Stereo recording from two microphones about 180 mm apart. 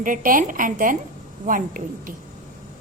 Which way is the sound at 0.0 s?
50° right (ahead or behind).